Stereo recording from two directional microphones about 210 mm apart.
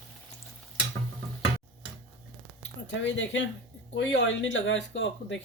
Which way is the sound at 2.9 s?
60° left (ahead or behind).